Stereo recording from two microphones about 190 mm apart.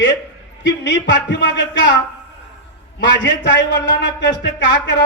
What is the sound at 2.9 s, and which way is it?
Speech, 70° left (ahead or behind).